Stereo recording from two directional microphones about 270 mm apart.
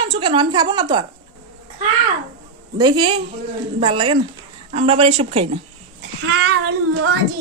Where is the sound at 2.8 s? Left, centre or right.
Centre.